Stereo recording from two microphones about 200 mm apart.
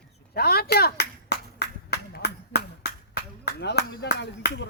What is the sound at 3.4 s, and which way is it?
Speech, 60° left (ahead or behind).